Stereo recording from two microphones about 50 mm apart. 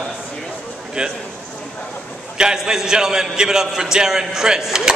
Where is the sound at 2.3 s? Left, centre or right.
Centre.